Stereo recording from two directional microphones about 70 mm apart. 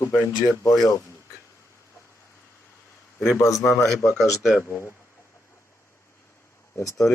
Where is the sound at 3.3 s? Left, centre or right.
Left.